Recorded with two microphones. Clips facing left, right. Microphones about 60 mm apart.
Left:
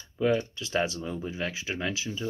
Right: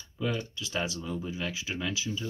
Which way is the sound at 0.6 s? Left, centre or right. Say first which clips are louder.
Left 4 dB; left.